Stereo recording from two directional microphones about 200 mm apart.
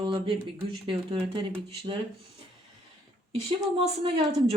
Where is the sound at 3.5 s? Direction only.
25° right (ahead or behind).